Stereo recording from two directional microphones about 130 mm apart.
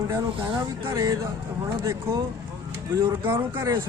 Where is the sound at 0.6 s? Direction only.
35° right (ahead or behind).